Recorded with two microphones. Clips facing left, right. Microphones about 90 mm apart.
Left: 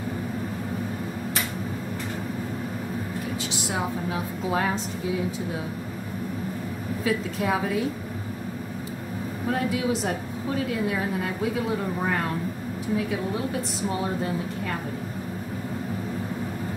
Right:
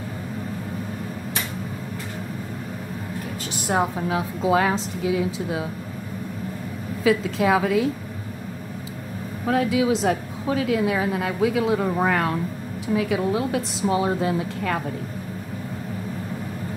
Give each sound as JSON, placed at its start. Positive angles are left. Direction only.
{"t": 3.5, "sound": "a sound", "side_deg": -50}
{"t": 4.1, "sound": "a woman's voice", "side_deg": -90}
{"t": 7.1, "sound": "a woman's voice", "side_deg": -90}
{"t": 9.5, "sound": "a woman's voice", "side_deg": -90}